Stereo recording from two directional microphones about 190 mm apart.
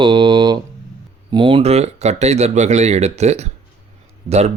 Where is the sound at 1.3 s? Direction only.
25° right (ahead or behind).